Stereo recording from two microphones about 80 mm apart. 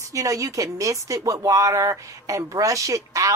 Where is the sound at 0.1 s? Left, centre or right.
Right.